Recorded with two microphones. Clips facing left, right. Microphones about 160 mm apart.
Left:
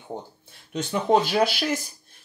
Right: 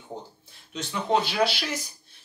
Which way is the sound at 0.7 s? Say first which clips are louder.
Left 4 dB; 45° left (ahead or behind).